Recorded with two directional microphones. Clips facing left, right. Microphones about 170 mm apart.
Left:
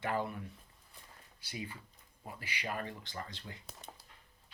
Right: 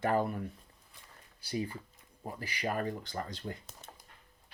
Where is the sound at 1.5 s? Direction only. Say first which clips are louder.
Right 8 dB; 40° right (ahead or behind).